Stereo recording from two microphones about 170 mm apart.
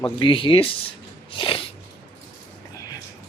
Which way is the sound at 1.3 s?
30° left (ahead or behind).